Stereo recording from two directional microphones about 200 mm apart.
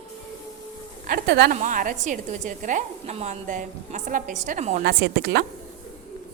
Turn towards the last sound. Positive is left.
turn(degrees=-55)  # may be behind; listen again after turning